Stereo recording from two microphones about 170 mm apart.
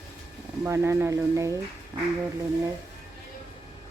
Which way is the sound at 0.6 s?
15° right (ahead or behind).